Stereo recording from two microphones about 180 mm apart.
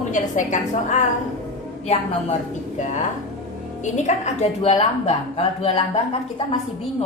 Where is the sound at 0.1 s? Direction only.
45° left (ahead or behind).